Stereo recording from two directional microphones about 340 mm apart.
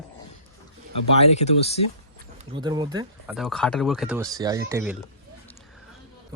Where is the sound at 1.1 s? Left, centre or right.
Centre.